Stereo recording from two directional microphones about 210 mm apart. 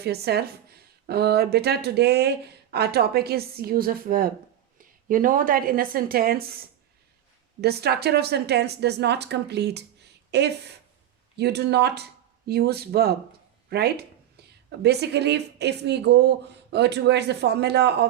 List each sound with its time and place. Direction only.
0.0 s a woman's voice: 50° right (ahead or behind)